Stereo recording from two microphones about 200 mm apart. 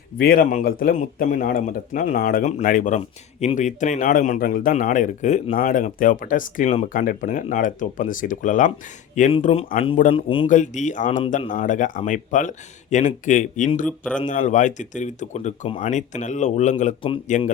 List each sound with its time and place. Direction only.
0.2 s a man's voice: 45° left (ahead or behind); by 10.4 s 25° left (ahead or behind)
10.5 s a man's voice: 40° left (ahead or behind)
13.8 s a man's voice: 5° left (ahead or behind)
14.3 s a man's voice: 40° left (ahead or behind)